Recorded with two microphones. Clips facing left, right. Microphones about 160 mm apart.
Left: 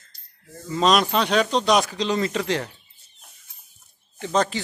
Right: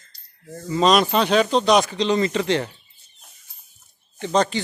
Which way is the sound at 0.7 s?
Centre (ahead or behind).